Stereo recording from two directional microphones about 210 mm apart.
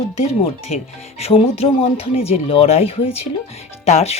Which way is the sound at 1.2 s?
30° left (ahead or behind).